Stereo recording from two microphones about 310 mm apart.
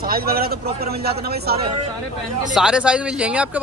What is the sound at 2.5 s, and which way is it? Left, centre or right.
Speech, centre.